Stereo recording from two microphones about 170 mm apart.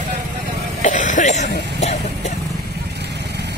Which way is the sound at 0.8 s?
45° left (ahead or behind).